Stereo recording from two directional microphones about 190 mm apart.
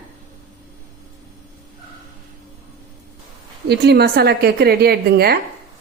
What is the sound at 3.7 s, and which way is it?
A woman's voice, 60° right (ahead or behind).